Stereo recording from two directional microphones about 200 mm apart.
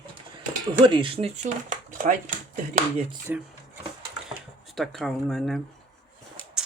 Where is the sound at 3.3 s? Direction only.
10° right (ahead or behind).